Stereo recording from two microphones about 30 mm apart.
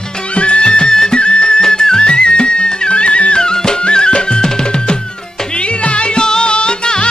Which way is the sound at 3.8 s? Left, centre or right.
Left.